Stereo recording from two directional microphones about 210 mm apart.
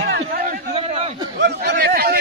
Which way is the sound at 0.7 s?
30° right (ahead or behind).